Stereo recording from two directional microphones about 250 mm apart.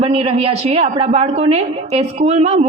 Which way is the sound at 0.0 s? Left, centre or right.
Right.